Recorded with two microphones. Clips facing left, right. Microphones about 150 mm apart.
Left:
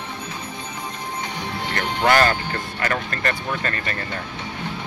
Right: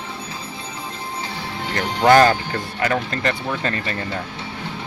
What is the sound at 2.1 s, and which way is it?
Speech, 15° right (ahead or behind).